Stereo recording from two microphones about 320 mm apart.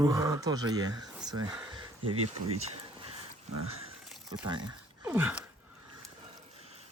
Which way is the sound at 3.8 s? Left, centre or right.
Centre.